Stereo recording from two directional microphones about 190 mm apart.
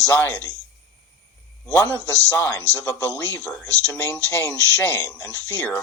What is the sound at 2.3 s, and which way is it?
Speech, 15° left (ahead or behind).